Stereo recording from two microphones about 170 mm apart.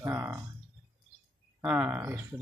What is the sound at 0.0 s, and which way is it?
Speech, 10° right (ahead or behind).